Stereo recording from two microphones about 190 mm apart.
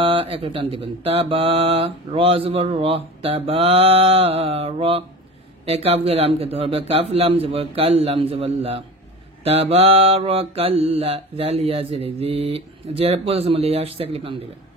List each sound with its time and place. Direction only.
0.0 s speech: 30° right (ahead or behind)